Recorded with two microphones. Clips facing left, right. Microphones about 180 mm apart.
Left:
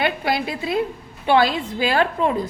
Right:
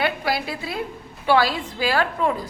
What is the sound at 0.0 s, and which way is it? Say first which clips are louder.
A woman's voice: left 2 dB; 20° left (ahead or behind).